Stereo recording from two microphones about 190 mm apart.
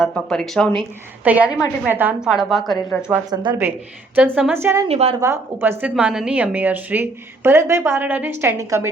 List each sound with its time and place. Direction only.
0.0 s a woman's voice: centre (ahead or behind)
1.2 s a woman's voice: 10° right (ahead or behind)
3.2 s speech: 20° right (ahead or behind)
4.1 s a woman's voice: 5° right (ahead or behind)
4.9 s a woman's voice: 35° right (ahead or behind)
5.2 s a woman's voice: 15° right (ahead or behind)